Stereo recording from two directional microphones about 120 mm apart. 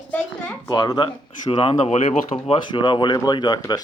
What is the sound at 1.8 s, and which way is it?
Speech, 65° left (ahead or behind).